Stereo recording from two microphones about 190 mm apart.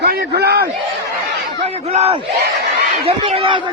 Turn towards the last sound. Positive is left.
turn(degrees=-30)  # may be behind; listen again after turning